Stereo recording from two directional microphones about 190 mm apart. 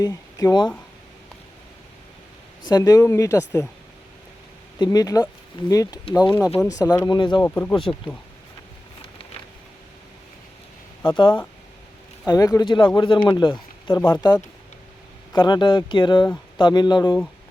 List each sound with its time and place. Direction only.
0.0 s speech: 15° left (ahead or behind)
2.6 s speech: 20° left (ahead or behind)
4.8 s speech: 20° left (ahead or behind)
7.4 s speech: 10° left (ahead or behind)
11.0 s speech: 20° left (ahead or behind)